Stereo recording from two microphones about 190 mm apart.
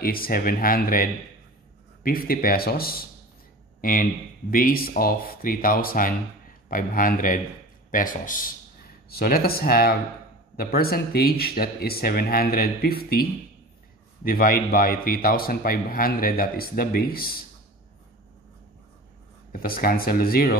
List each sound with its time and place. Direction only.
0.0 s a man's voice: 50° left (ahead or behind)
2.0 s a man's voice: 50° left (ahead or behind)
19.5 s a man's voice: 50° left (ahead or behind)